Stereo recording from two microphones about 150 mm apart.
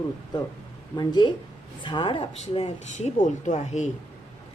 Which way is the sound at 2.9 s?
55° left (ahead or behind).